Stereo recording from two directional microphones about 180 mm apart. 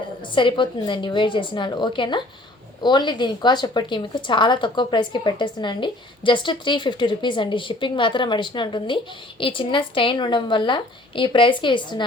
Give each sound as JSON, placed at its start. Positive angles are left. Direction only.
{"t": 0.3, "sound": "a woman's voice", "side_deg": 25}